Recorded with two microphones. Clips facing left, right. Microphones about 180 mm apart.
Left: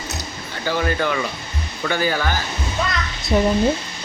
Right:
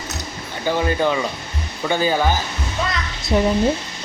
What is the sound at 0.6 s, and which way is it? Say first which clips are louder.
Speech: right 2 dB; 20° right (ahead or behind).